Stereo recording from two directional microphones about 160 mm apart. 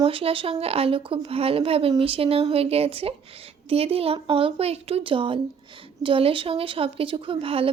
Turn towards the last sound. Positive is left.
turn(degrees=-35)  # may be behind; listen again after turning